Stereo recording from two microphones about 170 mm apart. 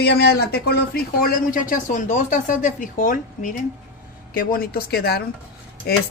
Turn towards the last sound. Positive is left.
turn(degrees=70)  # may be behind; listen again after turning